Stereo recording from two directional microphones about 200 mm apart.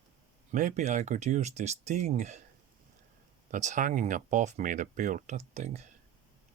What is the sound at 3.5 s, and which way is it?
Speech, 40° right (ahead or behind).